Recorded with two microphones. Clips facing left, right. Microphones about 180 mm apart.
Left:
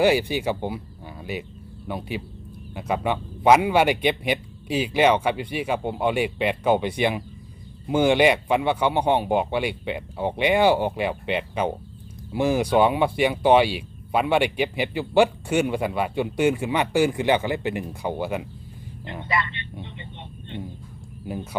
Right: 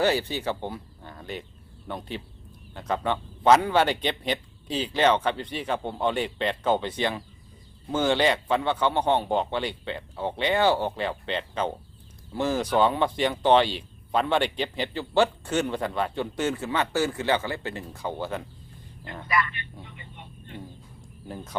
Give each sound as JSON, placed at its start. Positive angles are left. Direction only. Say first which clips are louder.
{"t": 0.0, "sound": "speech", "louder": "left 5 dB", "side_deg": 10}
{"t": 19.2, "sound": "speech", "louder": "even", "side_deg": 25}
{"t": 19.8, "sound": "vehicle", "louder": "left 6 dB", "side_deg": 25}